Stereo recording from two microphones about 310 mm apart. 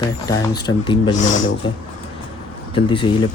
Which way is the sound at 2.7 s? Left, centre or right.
Centre.